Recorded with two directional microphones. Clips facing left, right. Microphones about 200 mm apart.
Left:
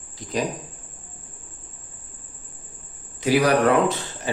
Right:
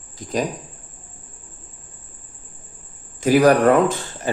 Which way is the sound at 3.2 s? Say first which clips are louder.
Right 4 dB; 45° right (ahead or behind).